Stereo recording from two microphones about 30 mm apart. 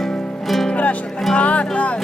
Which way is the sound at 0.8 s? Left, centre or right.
Left.